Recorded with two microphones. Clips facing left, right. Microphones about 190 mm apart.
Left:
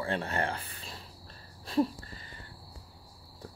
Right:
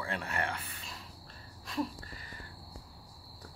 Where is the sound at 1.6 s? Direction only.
30° left (ahead or behind).